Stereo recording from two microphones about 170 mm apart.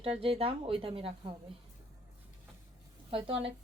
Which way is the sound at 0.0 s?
35° right (ahead or behind).